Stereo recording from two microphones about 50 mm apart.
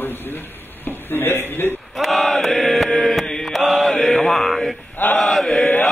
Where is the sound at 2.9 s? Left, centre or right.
Centre.